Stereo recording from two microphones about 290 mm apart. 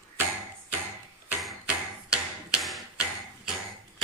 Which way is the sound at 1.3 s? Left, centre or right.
Centre.